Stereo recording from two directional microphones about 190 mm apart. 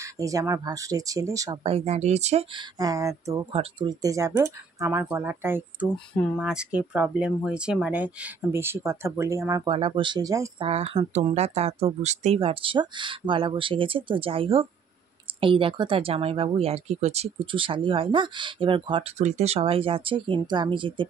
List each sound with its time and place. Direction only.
0.0 s speech: 15° right (ahead or behind)
1.6 s speech: 30° right (ahead or behind)
2.8 s speech: 15° right (ahead or behind)
9.7 s speech: 30° right (ahead or behind)
10.7 s speech: 30° right (ahead or behind)